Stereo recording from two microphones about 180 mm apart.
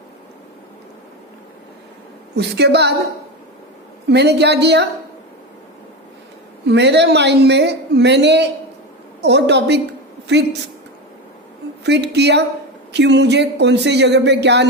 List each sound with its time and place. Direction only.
2.3 s a woman's voice: 70° right (ahead or behind)
4.1 s a woman's voice: 70° right (ahead or behind)
6.7 s a woman's voice: 70° right (ahead or behind)
11.8 s a woman's voice: 70° right (ahead or behind)